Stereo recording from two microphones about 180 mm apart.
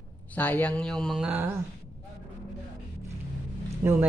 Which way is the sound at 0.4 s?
10° left (ahead or behind).